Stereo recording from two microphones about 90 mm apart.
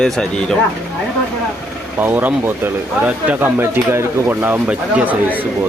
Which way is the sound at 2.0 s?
20° right (ahead or behind).